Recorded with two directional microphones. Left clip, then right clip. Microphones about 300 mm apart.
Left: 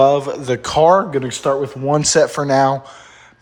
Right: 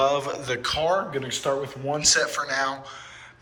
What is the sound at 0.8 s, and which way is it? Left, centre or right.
A man's voice, left.